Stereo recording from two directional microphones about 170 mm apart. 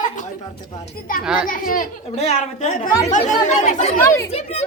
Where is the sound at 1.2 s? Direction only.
5° right (ahead or behind).